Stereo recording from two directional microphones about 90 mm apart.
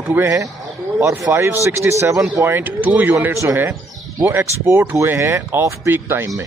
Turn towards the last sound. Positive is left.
turn(degrees=-25)  # may be behind; listen again after turning